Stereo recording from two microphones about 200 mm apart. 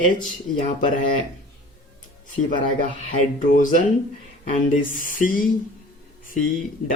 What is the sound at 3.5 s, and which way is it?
Speech, 40° left (ahead or behind).